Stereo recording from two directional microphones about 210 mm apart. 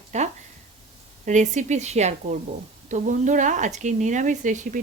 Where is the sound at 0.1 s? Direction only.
30° right (ahead or behind).